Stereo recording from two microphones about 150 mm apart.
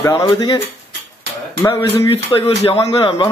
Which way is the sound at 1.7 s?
35° left (ahead or behind).